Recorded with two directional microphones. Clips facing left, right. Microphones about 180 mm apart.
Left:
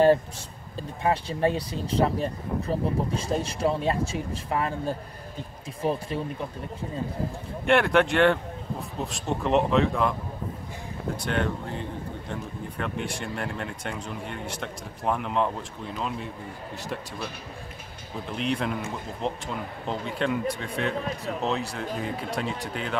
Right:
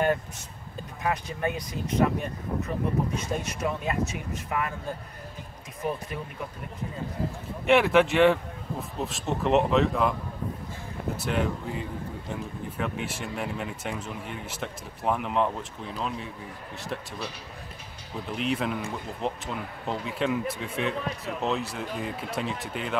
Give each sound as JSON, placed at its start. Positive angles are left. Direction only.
{"t": 0.7, "sound": "speech", "side_deg": 30}
{"t": 7.6, "sound": "speech", "side_deg": 0}
{"t": 11.1, "sound": "speech", "side_deg": -5}
{"t": 18.3, "sound": "speech", "side_deg": 0}